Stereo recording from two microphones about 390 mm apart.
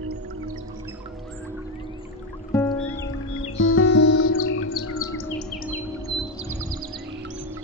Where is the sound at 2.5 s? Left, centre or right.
Centre.